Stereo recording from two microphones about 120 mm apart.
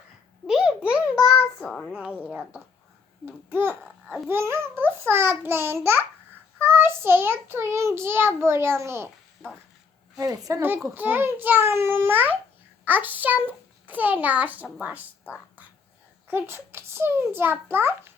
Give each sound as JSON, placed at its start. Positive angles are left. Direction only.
{"t": 0.4, "sound": "babbling", "side_deg": -5}
{"t": 1.8, "sound": "a child's voice", "side_deg": -5}
{"t": 3.2, "sound": "a child's voice", "side_deg": -15}
{"t": 4.3, "sound": "child singing", "side_deg": -20}
{"t": 10.2, "sound": "child singing", "side_deg": -30}
{"t": 10.9, "sound": "a child's voice", "side_deg": -15}
{"t": 16.2, "sound": "child singing", "side_deg": -20}